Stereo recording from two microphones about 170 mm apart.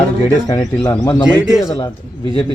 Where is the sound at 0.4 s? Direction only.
20° left (ahead or behind).